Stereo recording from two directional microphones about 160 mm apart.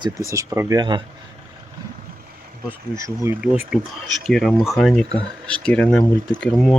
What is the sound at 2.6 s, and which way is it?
Speech, 15° right (ahead or behind).